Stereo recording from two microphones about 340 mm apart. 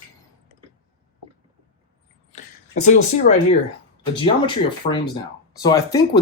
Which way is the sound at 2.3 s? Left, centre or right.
Left.